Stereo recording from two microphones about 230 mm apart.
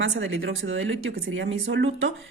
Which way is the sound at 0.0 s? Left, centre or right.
Right.